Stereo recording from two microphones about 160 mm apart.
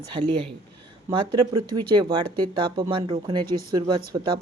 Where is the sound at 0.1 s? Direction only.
30° right (ahead or behind).